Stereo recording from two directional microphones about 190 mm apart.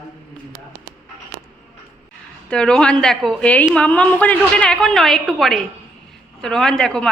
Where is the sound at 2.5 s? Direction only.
5° left (ahead or behind).